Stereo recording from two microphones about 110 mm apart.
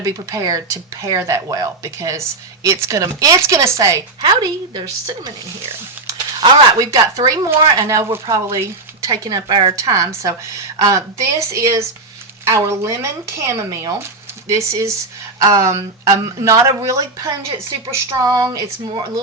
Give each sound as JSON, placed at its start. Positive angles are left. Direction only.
{"t": 0.0, "sound": "speech", "side_deg": -30}
{"t": 4.2, "sound": "a woman's voice", "side_deg": -45}
{"t": 6.4, "sound": "speech", "side_deg": -40}
{"t": 9.7, "sound": "speech", "side_deg": -30}